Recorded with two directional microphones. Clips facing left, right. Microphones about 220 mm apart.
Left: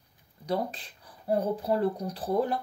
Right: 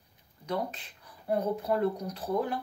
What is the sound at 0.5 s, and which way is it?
Speech, 35° left (ahead or behind).